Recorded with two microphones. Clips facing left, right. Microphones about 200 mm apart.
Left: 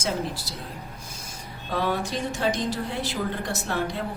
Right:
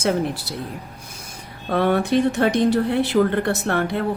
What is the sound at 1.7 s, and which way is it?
A woman's voice, 60° right (ahead or behind).